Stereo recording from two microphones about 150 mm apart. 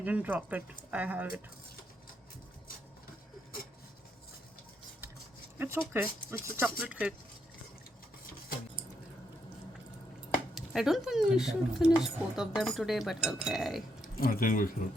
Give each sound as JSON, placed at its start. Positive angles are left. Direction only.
{"t": 0.0, "sound": "speech", "side_deg": -10}
{"t": 5.5, "sound": "speech", "side_deg": -15}
{"t": 10.5, "sound": "speech", "side_deg": 0}
{"t": 14.2, "sound": "speech", "side_deg": 75}